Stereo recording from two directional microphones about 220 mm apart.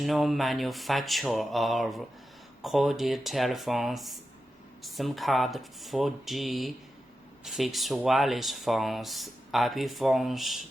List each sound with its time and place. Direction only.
0.0 s speech: centre (ahead or behind)